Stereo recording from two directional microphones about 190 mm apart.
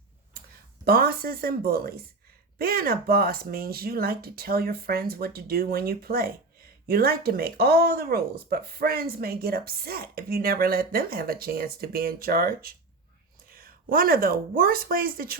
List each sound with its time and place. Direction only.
0.9 s speech: 50° right (ahead or behind)